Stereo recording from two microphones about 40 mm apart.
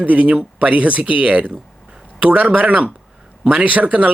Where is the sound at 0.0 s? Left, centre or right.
Right.